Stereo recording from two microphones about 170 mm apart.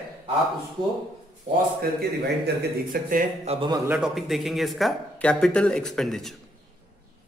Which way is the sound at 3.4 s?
30° right (ahead or behind).